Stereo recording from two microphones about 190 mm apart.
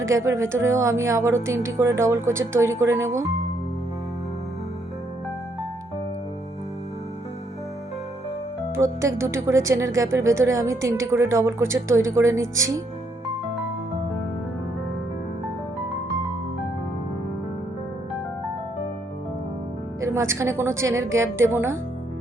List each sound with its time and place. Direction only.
0.0 s speech: 15° right (ahead or behind)
8.7 s speech: 15° right (ahead or behind)
20.0 s speech: 15° right (ahead or behind)